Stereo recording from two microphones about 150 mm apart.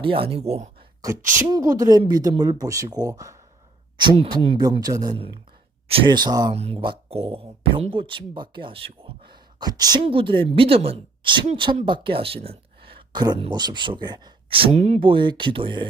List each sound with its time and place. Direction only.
0.0 s speech: 35° right (ahead or behind)
1.5 s speech: 25° right (ahead or behind)
6.5 s speech: 45° right (ahead or behind)